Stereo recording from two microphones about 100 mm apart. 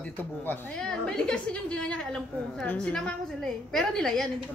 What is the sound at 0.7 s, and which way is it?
A woman's voice, 5° left (ahead or behind).